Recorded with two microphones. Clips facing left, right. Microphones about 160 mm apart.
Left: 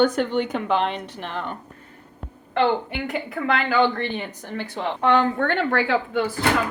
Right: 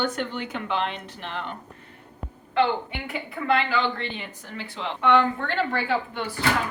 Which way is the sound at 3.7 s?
50° left (ahead or behind).